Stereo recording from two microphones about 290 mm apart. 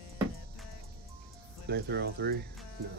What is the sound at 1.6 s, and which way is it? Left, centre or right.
Speech, right.